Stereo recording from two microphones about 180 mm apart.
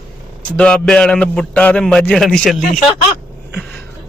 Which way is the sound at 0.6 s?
5° left (ahead or behind).